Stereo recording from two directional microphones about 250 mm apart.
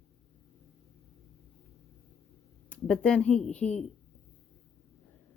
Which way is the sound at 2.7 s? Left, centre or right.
Centre.